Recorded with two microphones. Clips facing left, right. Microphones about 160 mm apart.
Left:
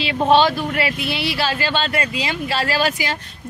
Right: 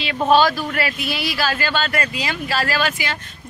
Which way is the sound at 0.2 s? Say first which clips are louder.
Even; 25° left (ahead or behind).